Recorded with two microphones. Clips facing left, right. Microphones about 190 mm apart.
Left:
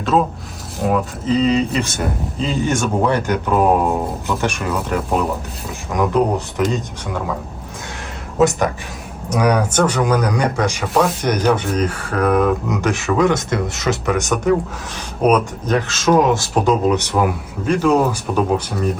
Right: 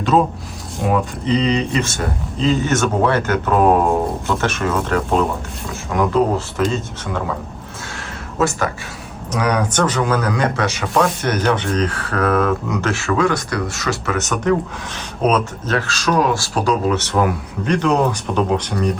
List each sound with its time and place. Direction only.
0.8 s speech: 5° left (ahead or behind)
8.4 s speech: 20° left (ahead or behind)